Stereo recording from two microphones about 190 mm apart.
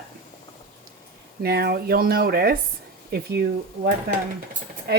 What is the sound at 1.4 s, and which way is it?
Speech, 55° right (ahead or behind).